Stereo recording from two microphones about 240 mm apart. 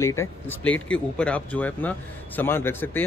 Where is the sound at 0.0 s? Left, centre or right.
Centre.